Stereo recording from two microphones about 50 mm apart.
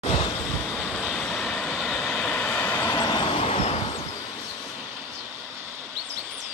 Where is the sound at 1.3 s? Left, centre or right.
Centre.